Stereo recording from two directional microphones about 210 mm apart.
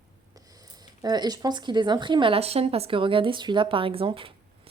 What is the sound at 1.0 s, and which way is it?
A woman's voice, 20° right (ahead or behind).